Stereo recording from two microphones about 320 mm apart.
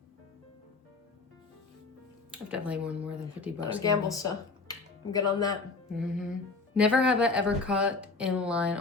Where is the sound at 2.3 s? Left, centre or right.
Centre.